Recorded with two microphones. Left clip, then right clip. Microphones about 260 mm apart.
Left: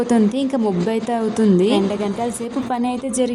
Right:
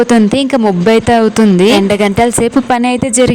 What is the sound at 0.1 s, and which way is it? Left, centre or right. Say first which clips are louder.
Speech: right 8 dB; right.